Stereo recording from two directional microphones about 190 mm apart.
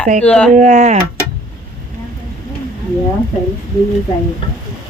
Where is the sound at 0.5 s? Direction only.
40° right (ahead or behind).